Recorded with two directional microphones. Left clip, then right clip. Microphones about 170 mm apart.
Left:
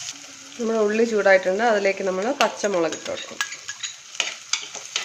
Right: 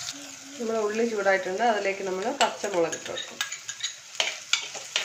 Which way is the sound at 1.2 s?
90° left.